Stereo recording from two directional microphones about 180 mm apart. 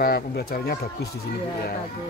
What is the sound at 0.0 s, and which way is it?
Speech, 55° left (ahead or behind).